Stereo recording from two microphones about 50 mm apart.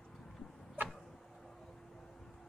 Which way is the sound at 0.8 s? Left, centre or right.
Centre.